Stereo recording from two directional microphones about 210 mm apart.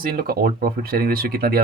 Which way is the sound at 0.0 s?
45° right (ahead or behind).